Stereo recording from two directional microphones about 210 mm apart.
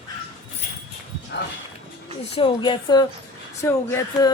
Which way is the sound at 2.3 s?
25° left (ahead or behind).